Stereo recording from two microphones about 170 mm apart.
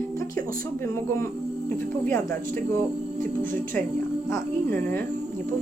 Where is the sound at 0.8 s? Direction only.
15° left (ahead or behind).